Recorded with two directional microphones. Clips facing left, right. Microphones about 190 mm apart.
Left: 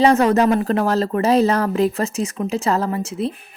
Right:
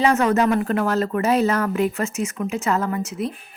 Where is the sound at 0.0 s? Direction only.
35° left (ahead or behind).